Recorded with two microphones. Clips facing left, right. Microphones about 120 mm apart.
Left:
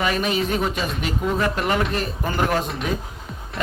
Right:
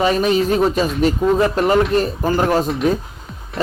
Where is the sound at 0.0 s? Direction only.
35° right (ahead or behind).